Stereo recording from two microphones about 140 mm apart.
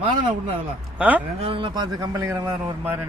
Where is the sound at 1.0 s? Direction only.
10° right (ahead or behind).